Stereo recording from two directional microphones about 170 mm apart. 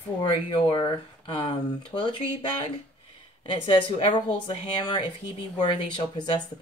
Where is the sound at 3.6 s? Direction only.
30° left (ahead or behind).